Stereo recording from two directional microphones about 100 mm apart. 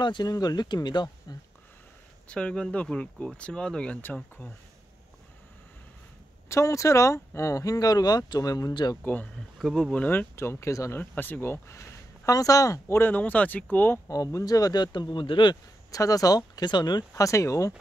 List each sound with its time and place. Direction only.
0.0 s speech: 45° left (ahead or behind)
2.2 s speech: 10° left (ahead or behind)
6.5 s speech: 30° left (ahead or behind)
9.0 s speech: 15° left (ahead or behind)
9.6 s speech: 5° left (ahead or behind)
10.0 s speech: 25° left (ahead or behind)
11.0 s speech: 20° left (ahead or behind)
13.1 s speech: 15° left (ahead or behind)
14.0 s speech: 35° left (ahead or behind); by 15.5 s 55° left (ahead or behind)
15.9 s speech: 35° left (ahead or behind)
17.1 s speech: 30° left (ahead or behind)